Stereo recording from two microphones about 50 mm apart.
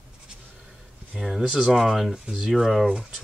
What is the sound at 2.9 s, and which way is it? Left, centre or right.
Speech, centre.